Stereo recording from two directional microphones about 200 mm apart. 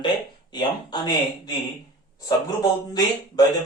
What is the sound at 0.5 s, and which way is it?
A man's voice, 20° left (ahead or behind).